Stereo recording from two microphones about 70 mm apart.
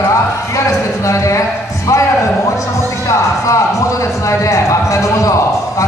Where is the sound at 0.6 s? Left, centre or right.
Left.